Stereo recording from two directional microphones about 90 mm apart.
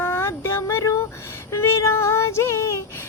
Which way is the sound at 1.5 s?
30° left (ahead or behind).